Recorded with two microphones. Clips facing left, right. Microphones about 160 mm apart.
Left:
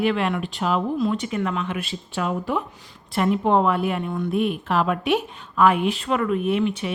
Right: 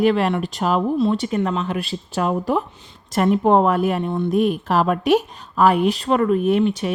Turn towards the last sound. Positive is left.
turn(degrees=-40)  # may be behind; listen again after turning